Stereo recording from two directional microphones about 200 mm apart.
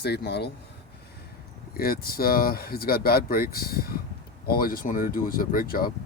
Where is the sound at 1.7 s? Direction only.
45° left (ahead or behind).